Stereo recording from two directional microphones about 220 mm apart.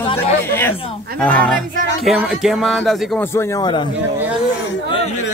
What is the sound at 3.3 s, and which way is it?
Speech, 20° left (ahead or behind).